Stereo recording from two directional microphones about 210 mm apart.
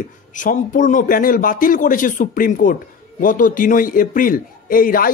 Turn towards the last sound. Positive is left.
turn(degrees=40)  # may be behind; listen again after turning